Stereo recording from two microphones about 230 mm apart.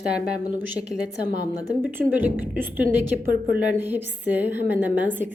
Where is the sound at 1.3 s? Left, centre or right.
Left.